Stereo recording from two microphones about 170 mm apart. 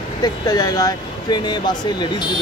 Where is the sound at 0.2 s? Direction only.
20° left (ahead or behind).